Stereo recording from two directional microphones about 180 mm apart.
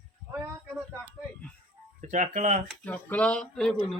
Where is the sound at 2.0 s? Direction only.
45° right (ahead or behind).